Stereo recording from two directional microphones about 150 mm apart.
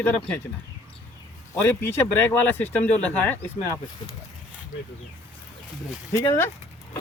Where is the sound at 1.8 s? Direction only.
15° left (ahead or behind).